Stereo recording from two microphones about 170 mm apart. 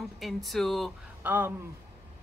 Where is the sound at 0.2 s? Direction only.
Centre (ahead or behind).